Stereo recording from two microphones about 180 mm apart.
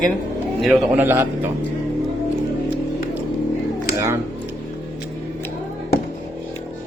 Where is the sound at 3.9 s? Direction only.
15° right (ahead or behind).